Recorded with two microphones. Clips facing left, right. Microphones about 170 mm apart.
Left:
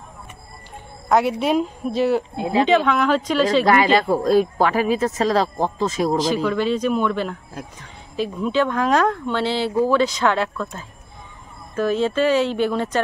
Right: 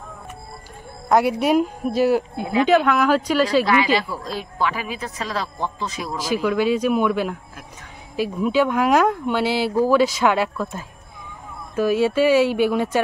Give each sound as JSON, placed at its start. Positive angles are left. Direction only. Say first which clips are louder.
{"t": 1.0, "sound": "speech", "louder": "right 1 dB", "side_deg": -5}
{"t": 2.3, "sound": "speech", "louder": "left 1 dB", "side_deg": 25}
{"t": 2.7, "sound": "speech", "louder": "right 2 dB", "side_deg": -5}
{"t": 3.6, "sound": "speech", "louder": "left 3 dB", "side_deg": 50}
{"t": 6.3, "sound": "speech", "louder": "right 1 dB", "side_deg": -5}